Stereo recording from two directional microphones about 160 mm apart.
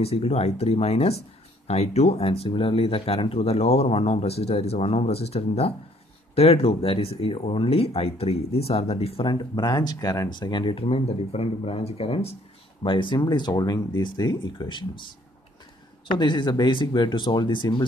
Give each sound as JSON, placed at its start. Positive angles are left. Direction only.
{"t": 0.0, "sound": "speech", "side_deg": 40}
{"t": 16.2, "sound": "speech", "side_deg": 30}